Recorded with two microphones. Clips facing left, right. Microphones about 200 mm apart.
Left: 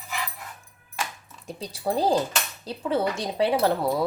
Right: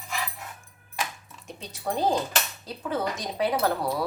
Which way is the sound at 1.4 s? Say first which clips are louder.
Left 4 dB; 35° left (ahead or behind).